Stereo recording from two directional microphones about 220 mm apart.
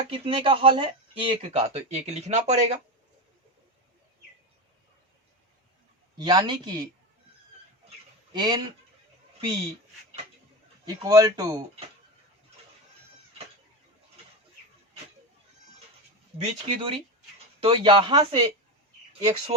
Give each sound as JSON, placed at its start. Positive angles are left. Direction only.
{"t": 0.1, "sound": "speech", "side_deg": -25}
{"t": 6.1, "sound": "speech", "side_deg": -20}
{"t": 8.3, "sound": "speech", "side_deg": -20}
{"t": 10.8, "sound": "speech", "side_deg": -15}
{"t": 16.4, "sound": "speech", "side_deg": -25}